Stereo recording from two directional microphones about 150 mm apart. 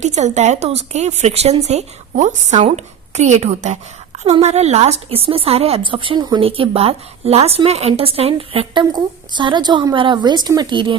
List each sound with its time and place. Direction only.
0.0 s speech: 50° right (ahead or behind); by 10.9 s 30° right (ahead or behind)